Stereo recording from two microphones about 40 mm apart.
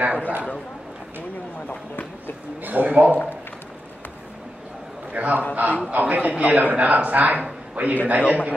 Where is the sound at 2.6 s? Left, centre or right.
Right.